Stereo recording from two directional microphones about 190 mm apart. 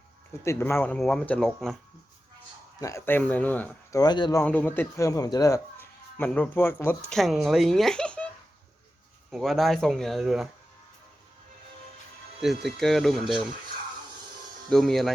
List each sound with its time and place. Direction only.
0.4 s speech: 15° left (ahead or behind)
2.8 s speech: 15° left (ahead or behind)
4.0 s speech: 20° left (ahead or behind)
4.4 s speech: 10° left (ahead or behind)
7.2 s speech: centre (ahead or behind)
9.3 s speech: centre (ahead or behind)
12.6 s speech: centre (ahead or behind)
14.7 s speech: centre (ahead or behind)